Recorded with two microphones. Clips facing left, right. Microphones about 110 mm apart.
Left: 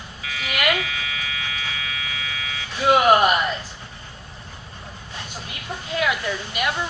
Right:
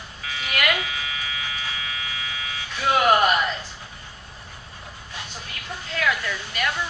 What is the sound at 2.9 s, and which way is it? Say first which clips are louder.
Speech: left 3 dB; 15° left (ahead or behind).